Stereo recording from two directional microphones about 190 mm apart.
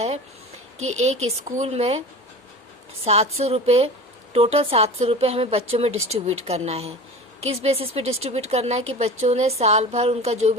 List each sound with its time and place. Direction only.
0.9 s speech: 35° right (ahead or behind)
3.0 s speech: 35° right (ahead or behind)